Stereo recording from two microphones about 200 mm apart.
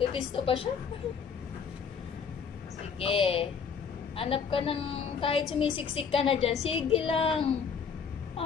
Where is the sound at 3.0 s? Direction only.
30° left (ahead or behind).